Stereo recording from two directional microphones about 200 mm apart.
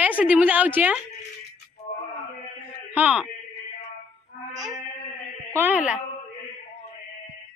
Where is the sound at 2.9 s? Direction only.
5° right (ahead or behind).